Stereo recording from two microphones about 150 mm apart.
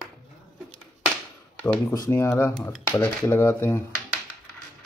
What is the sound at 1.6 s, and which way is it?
Speech, 10° left (ahead or behind).